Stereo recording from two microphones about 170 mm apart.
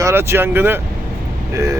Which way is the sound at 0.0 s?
15° right (ahead or behind).